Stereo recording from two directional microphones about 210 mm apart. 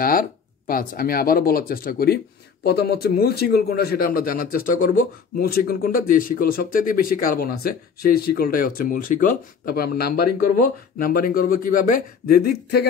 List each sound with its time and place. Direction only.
0.0 s speech: 45° left (ahead or behind)